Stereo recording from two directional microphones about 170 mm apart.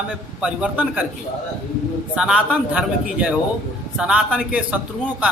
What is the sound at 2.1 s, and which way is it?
A man's voice, 5° right (ahead or behind).